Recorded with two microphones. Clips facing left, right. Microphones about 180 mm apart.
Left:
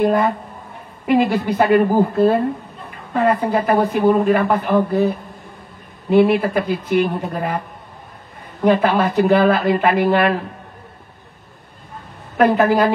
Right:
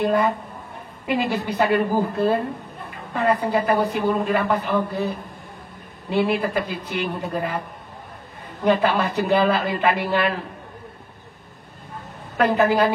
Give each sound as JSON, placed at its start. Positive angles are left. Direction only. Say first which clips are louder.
{"t": 1.0, "sound": "speech", "louder": "left 7 dB", "side_deg": 55}
{"t": 3.4, "sound": "speech", "louder": "left 3 dB", "side_deg": 55}
{"t": 8.6, "sound": "speech", "louder": "left 4 dB", "side_deg": 55}
{"t": 12.4, "sound": "speech", "louder": "left 4 dB", "side_deg": 55}